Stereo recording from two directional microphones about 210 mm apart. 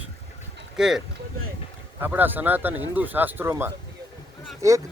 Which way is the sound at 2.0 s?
10° right (ahead or behind).